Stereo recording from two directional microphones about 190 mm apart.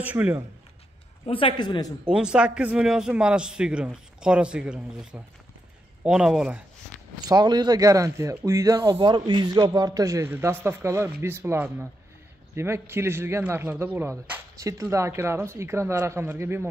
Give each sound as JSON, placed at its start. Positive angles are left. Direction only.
{"t": 0.0, "sound": "speech", "side_deg": -10}
{"t": 1.2, "sound": "speech", "side_deg": 25}
{"t": 2.0, "sound": "a man's voice", "side_deg": -5}
{"t": 6.9, "sound": "zipper", "side_deg": 5}
{"t": 7.2, "sound": "speech", "side_deg": -20}